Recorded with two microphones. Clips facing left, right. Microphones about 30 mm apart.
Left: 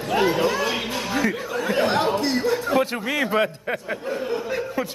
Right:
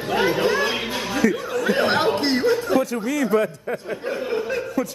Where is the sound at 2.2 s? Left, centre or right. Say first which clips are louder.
Right 3 dB; right.